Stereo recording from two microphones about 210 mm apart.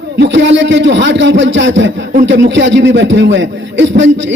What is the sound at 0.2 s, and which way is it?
A man's voice, 60° right (ahead or behind).